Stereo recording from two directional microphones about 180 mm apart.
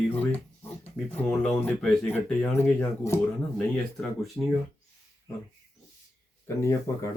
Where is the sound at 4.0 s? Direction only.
Centre (ahead or behind).